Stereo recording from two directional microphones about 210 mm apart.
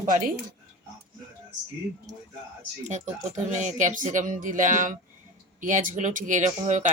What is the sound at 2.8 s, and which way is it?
Speech, 35° right (ahead or behind).